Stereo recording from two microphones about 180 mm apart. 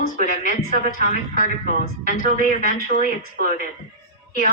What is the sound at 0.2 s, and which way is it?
A woman's voice, 40° left (ahead or behind).